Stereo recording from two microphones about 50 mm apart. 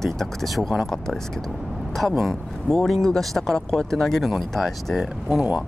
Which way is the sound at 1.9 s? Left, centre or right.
Centre.